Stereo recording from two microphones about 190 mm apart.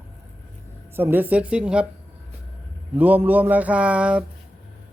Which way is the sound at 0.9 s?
10° right (ahead or behind).